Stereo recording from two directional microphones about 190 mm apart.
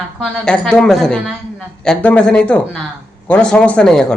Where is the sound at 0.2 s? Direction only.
Centre (ahead or behind).